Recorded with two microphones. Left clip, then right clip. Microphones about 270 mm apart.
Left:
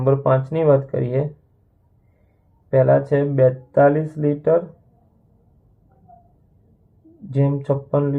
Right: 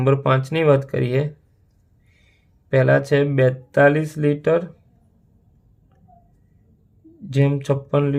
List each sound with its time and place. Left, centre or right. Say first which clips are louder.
0.0 s speech: left 1 dB; right
2.6 s speech: left 1 dB; right
6.1 s a sound: left 5 dB; right
7.3 s speech: even; right